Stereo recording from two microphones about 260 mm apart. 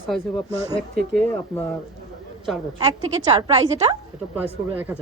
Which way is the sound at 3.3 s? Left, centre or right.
Centre.